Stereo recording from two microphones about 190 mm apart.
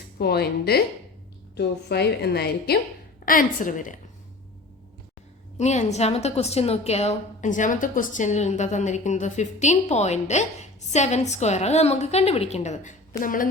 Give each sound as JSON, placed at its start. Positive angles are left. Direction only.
{"t": 0.2, "sound": "a woman's voice", "side_deg": 55}
{"t": 3.2, "sound": "a woman's voice", "side_deg": 45}
{"t": 5.5, "sound": "a woman's voice", "side_deg": 35}